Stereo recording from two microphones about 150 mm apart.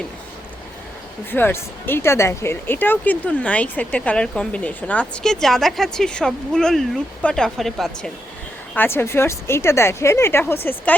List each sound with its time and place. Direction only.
1.3 s speech: 15° left (ahead or behind)
8.7 s speech: 15° left (ahead or behind)